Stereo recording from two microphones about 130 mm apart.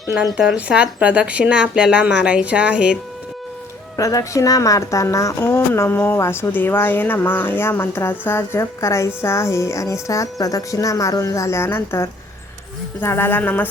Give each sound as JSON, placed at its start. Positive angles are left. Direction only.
{"t": 0.3, "sound": "speech", "side_deg": -10}
{"t": 3.9, "sound": "a woman's voice", "side_deg": 25}